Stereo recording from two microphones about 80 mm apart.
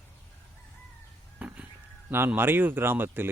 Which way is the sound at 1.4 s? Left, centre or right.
Centre.